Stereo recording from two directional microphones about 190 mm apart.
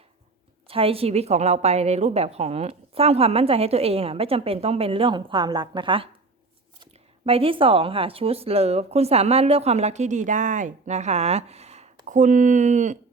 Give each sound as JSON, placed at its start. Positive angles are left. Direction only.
{"t": 0.7, "sound": "a woman's voice", "side_deg": -30}
{"t": 7.3, "sound": "a woman's voice", "side_deg": -30}